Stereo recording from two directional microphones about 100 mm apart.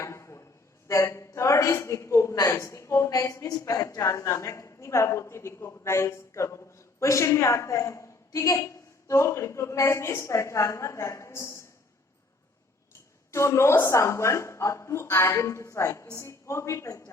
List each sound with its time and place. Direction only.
0.0 s a sound: 30° left (ahead or behind)
0.9 s a woman's voice: 30° left (ahead or behind)
13.3 s a woman's voice: 30° left (ahead or behind)